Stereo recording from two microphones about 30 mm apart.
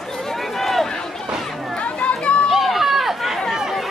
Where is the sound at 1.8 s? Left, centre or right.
Left.